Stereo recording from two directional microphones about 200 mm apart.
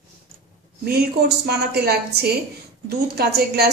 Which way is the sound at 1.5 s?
55° right (ahead or behind).